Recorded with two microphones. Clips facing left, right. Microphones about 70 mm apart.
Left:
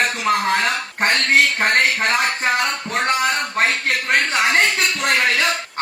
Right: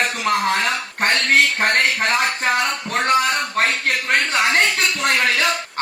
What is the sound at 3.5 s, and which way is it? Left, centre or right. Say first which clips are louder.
Speech: even; centre.